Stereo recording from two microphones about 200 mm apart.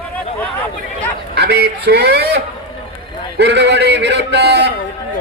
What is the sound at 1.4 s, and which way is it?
A man's voice, 55° right (ahead or behind).